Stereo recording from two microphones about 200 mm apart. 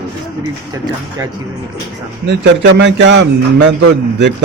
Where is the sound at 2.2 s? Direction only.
60° right (ahead or behind).